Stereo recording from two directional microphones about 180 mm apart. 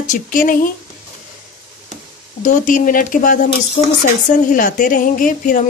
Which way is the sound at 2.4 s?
45° left (ahead or behind).